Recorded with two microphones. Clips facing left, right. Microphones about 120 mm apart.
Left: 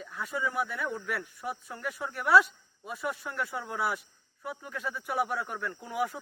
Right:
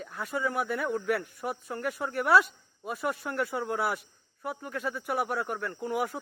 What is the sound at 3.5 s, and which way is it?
Speech, 45° right (ahead or behind).